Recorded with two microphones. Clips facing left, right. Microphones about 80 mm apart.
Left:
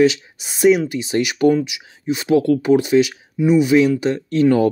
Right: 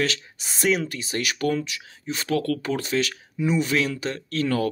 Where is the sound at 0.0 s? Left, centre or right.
Centre.